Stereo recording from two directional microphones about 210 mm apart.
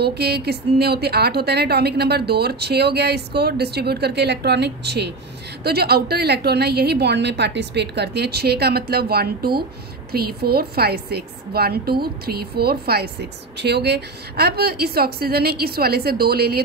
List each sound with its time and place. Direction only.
0.0 s a woman's voice: 50° right (ahead or behind)